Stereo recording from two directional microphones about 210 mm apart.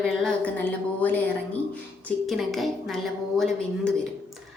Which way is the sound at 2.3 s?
Centre (ahead or behind).